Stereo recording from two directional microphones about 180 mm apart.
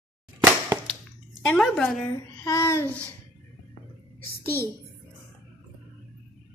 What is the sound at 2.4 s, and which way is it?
Speech, 15° left (ahead or behind).